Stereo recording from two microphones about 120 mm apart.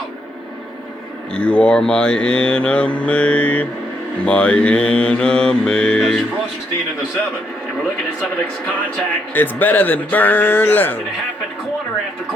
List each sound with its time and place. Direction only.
1.3 s mantra: 10° left (ahead or behind)
9.3 s mantra: 15° left (ahead or behind)